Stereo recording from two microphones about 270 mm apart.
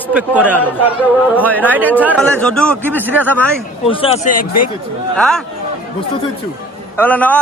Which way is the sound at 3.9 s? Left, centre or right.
Left.